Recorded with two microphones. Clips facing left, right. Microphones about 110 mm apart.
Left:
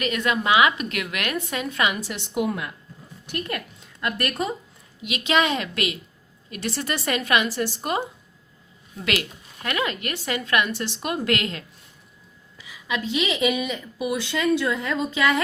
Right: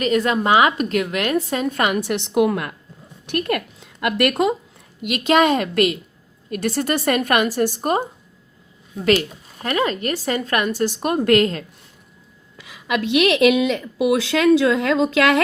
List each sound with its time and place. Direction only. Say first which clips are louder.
0.0 s a woman's voice: right 6 dB; 35° right (ahead or behind); by 3.6 s 65° right (ahead or behind)
4.0 s a woman's voice: right 8 dB; 75° right (ahead or behind)
5.0 s a woman's voice: right 6 dB; 45° right (ahead or behind)
9.6 s a woman's voice: right 6 dB; 35° right (ahead or behind)
12.5 s a woman's voice: right 6 dB; 65° right (ahead or behind); by 15.4 s 80° right